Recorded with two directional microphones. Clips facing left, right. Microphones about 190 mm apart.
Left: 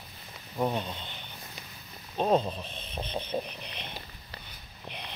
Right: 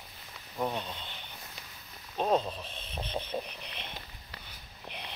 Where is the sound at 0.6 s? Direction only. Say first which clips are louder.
Left 4 dB; 5° left (ahead or behind).